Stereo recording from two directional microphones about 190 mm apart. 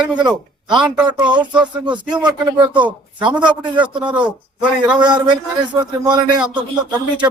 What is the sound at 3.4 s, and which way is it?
Speech, 25° right (ahead or behind).